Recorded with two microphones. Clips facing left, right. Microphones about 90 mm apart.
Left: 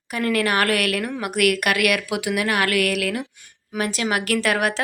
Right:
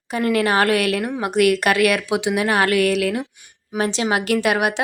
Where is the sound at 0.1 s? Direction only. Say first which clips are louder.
Right 3 dB; 25° right (ahead or behind).